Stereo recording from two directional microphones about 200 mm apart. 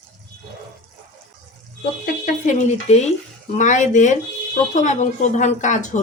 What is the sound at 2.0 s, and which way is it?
Speech, 35° left (ahead or behind).